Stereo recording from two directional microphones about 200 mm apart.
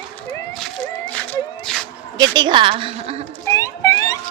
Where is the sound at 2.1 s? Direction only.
20° right (ahead or behind).